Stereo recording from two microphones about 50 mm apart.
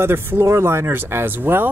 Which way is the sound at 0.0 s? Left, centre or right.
Right.